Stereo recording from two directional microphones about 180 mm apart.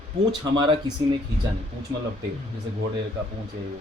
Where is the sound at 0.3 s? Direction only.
25° right (ahead or behind).